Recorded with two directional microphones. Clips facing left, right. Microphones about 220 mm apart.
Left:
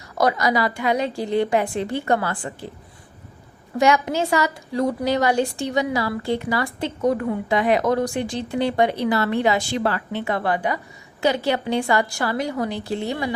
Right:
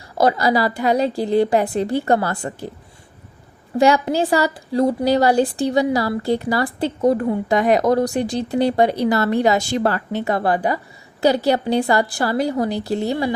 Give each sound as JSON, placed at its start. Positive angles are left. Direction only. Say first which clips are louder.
{"t": 0.2, "sound": "a woman's voice", "louder": "right 3 dB", "side_deg": -30}
{"t": 3.8, "sound": "a woman's voice", "louder": "right 3 dB", "side_deg": -35}